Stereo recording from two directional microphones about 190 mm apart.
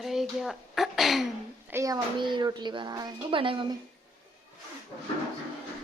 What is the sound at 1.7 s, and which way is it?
A woman's voice, 20° right (ahead or behind).